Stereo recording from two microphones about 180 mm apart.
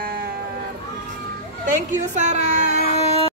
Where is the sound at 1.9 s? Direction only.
40° right (ahead or behind).